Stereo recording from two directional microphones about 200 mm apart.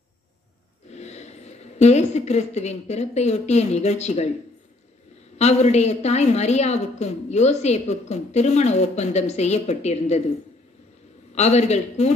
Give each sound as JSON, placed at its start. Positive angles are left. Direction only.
{"t": 0.9, "sound": "a woman's voice", "side_deg": 35}
{"t": 5.4, "sound": "a woman's voice", "side_deg": 35}
{"t": 11.3, "sound": "a woman's voice", "side_deg": 35}